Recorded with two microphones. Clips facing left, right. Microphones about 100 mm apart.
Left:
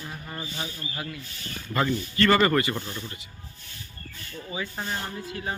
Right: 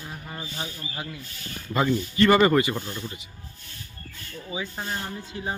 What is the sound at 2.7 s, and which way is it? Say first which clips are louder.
Speech: right 1 dB; 5° right (ahead or behind).